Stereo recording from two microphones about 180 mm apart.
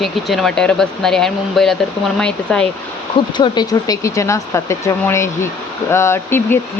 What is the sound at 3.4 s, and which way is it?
Speech, 20° left (ahead or behind).